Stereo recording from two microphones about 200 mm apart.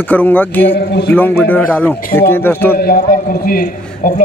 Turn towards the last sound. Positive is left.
turn(degrees=45)  # may be behind; listen again after turning